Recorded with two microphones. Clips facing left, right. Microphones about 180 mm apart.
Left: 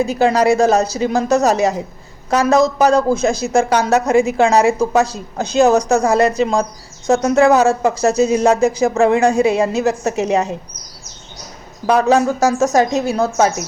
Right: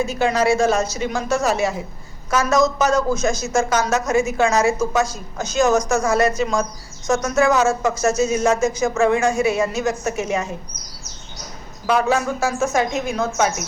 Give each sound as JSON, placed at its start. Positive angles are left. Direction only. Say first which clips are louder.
{"t": 0.0, "sound": "speech", "louder": "left 5 dB", "side_deg": 35}
{"t": 11.9, "sound": "speech", "louder": "left 5 dB", "side_deg": 40}